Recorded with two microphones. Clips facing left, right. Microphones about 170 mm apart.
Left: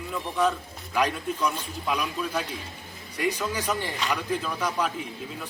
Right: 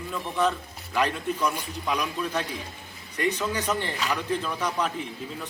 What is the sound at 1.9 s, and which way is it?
A man's voice, 10° left (ahead or behind).